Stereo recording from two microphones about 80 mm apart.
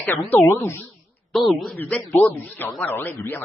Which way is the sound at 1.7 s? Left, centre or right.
Centre.